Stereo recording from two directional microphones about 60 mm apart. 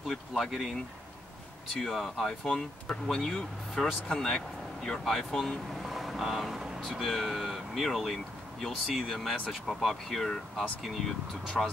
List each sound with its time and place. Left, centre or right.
0.0 s speech: centre
1.9 s speech: centre
11.6 s speech: centre